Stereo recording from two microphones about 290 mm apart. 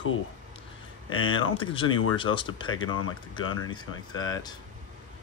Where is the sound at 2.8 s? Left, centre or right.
Left.